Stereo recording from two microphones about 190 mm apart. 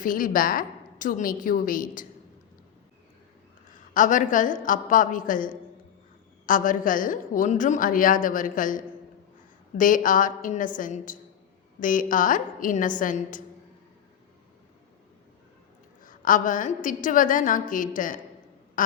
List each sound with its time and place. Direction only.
0.0 s a woman's voice: 45° left (ahead or behind)
3.7 s a woman's voice: 45° left (ahead or behind)
16.0 s a woman's voice: 45° left (ahead or behind)